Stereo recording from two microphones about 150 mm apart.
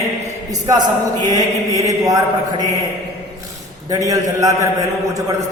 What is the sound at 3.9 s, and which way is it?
Chant, 25° right (ahead or behind).